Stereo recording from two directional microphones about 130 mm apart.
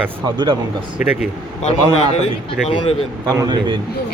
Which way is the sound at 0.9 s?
10° right (ahead or behind).